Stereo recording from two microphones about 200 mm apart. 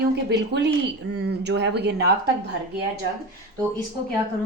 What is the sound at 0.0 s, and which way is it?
A woman's voice, 60° right (ahead or behind).